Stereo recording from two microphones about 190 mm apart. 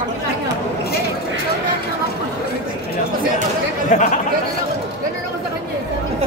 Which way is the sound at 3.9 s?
40° left (ahead or behind).